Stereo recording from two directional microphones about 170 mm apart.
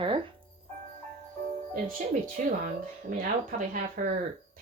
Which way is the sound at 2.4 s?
50° right (ahead or behind).